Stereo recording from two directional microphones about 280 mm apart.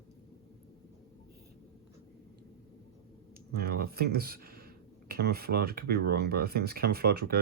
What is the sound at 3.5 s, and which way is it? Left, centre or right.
Speech, right.